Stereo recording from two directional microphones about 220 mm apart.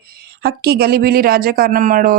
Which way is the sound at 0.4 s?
45° right (ahead or behind).